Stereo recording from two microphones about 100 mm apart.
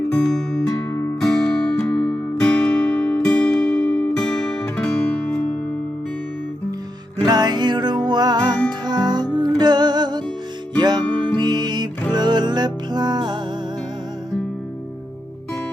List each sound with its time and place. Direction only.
0.1 s music: 5° left (ahead or behind)
7.3 s music: 45° right (ahead or behind)